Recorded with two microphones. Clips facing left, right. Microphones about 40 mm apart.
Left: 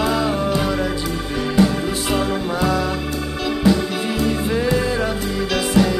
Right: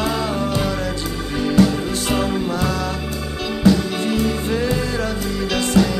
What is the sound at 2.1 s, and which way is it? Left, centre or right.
Music, centre.